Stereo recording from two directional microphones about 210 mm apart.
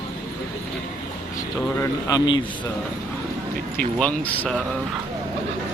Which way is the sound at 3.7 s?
5° left (ahead or behind).